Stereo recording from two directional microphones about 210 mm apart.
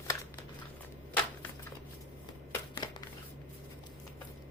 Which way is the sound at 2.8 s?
20° left (ahead or behind).